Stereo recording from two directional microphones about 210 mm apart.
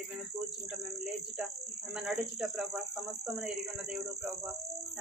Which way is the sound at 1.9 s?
5° right (ahead or behind).